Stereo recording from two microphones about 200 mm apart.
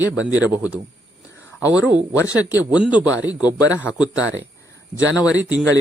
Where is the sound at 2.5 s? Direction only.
5° right (ahead or behind).